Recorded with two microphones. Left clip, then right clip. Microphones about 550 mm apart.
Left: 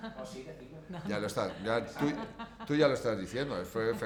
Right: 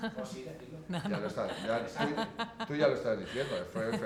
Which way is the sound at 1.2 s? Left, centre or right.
Left.